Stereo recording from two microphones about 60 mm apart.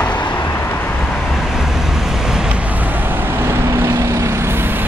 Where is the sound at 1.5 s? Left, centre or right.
Centre.